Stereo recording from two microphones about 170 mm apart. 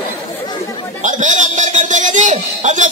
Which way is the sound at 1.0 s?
45° right (ahead or behind).